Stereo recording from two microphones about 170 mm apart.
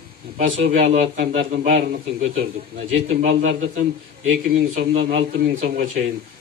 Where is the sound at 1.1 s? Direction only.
70° right (ahead or behind).